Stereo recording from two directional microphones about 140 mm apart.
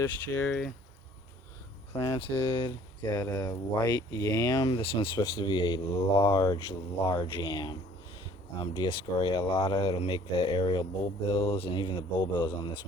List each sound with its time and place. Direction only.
0.0 s speech: 15° left (ahead or behind)
2.0 s speech: 35° left (ahead or behind)